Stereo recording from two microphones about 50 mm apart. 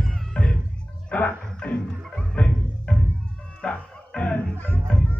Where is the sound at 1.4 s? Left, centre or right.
Centre.